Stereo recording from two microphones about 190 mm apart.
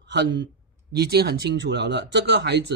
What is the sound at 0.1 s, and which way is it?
Speech, 65° right (ahead or behind).